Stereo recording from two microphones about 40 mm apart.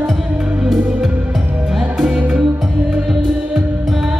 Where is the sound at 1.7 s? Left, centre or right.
Centre.